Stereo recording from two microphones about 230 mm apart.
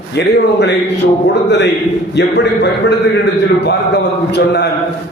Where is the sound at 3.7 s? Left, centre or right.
Left.